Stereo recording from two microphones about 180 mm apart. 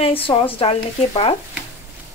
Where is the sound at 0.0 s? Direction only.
30° left (ahead or behind).